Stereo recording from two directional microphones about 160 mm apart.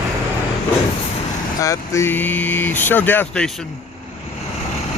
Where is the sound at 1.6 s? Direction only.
20° left (ahead or behind).